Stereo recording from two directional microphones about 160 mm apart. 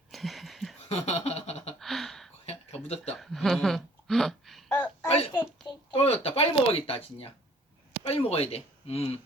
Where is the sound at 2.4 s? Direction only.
40° left (ahead or behind).